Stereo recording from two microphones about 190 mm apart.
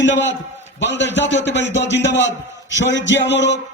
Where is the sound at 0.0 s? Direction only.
75° left (ahead or behind).